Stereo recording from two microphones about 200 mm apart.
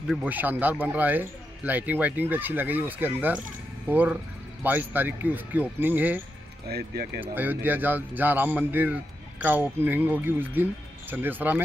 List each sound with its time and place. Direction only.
0.1 s a man's voice: 10° right (ahead or behind)
6.7 s speech: 55° right (ahead or behind)
7.2 s a man's voice: 10° right (ahead or behind)